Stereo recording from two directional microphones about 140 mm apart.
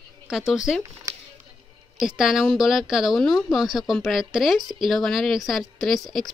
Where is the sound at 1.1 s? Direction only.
25° right (ahead or behind).